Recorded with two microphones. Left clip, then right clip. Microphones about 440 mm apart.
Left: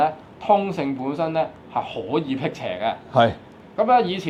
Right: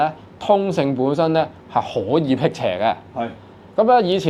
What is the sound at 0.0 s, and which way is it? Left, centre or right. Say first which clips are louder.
Speech: right 1 dB; centre.